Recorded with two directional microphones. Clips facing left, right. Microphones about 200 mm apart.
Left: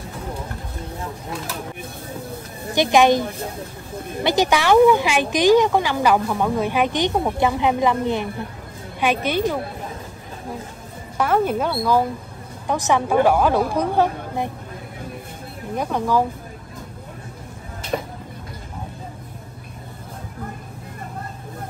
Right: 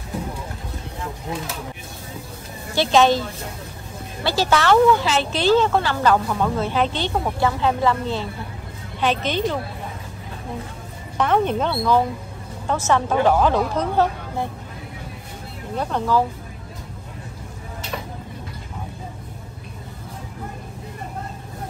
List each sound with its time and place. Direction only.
2.7 s speech: 15° left (ahead or behind)
11.1 s speech: 5° left (ahead or behind)
15.7 s speech: 10° left (ahead or behind)
17.9 s a sound: 35° left (ahead or behind)